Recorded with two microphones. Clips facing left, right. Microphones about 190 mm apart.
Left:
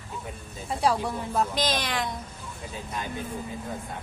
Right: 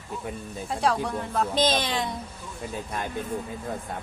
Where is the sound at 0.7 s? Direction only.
Centre (ahead or behind).